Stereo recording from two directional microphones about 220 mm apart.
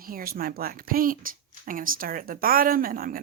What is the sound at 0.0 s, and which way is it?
Speech, 40° right (ahead or behind).